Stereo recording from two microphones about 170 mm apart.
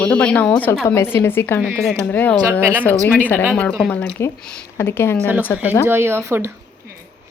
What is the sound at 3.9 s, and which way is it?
A woman's voice, 10° left (ahead or behind).